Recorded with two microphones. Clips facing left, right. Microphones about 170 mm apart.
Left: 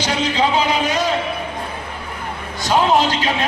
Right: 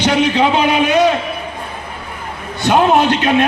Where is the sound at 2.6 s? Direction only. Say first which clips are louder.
Right 4 dB; 60° right (ahead or behind).